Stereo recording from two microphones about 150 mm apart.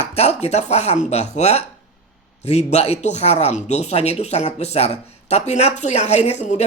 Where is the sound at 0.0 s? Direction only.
45° left (ahead or behind).